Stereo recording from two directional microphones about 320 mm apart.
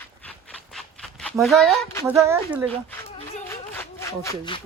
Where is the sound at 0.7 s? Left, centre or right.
Centre.